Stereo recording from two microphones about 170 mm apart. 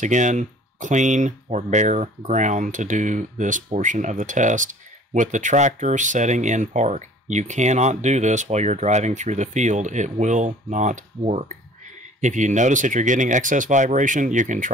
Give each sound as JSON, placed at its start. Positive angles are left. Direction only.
{"t": 0.0, "sound": "speech", "side_deg": -45}